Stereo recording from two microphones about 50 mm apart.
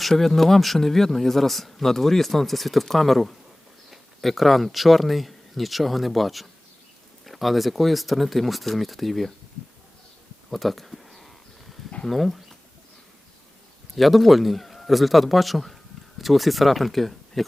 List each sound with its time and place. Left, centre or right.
0.0 s speech: centre
10.5 s a sound: centre
12.0 s speech: centre
13.9 s speech: centre